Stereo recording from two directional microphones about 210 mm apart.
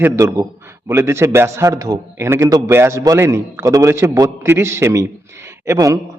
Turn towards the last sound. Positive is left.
turn(degrees=-15)  # may be behind; listen again after turning